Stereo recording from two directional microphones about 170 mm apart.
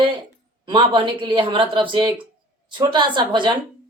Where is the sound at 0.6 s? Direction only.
30° right (ahead or behind).